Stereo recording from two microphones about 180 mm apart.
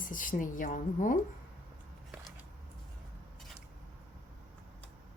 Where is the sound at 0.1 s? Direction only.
50° left (ahead or behind).